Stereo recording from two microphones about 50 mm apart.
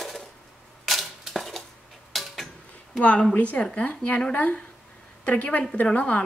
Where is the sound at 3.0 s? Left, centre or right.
Left.